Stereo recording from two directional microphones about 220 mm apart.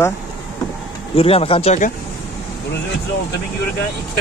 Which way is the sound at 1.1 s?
25° left (ahead or behind).